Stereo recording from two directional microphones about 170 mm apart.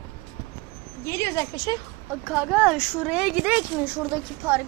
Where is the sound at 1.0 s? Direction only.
15° left (ahead or behind).